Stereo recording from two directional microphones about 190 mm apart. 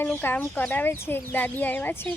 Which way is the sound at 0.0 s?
10° left (ahead or behind).